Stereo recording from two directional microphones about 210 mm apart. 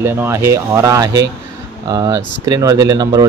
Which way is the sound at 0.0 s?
10° right (ahead or behind).